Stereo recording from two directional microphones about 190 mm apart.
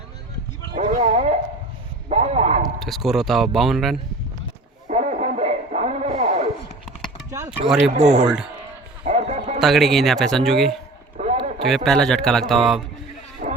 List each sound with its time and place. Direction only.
0.8 s a sound: 35° right (ahead or behind)
2.7 s speech: centre (ahead or behind)
4.9 s radio: 40° right (ahead or behind)
7.3 s a sound: 15° right (ahead or behind)
7.9 s speech: 35° right (ahead or behind)
8.2 s speech: 5° right (ahead or behind)
9.0 s bow-wow: 35° right (ahead or behind)
9.6 s speech: centre (ahead or behind)
11.2 s a sound: 35° right (ahead or behind)
11.6 s speech: centre (ahead or behind)
13.4 s sheep: 45° right (ahead or behind)